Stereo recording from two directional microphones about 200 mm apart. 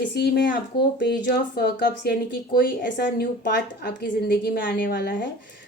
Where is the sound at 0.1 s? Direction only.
55° left (ahead or behind).